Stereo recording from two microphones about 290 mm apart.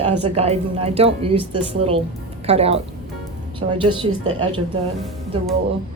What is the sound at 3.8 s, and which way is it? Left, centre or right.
Speech, right.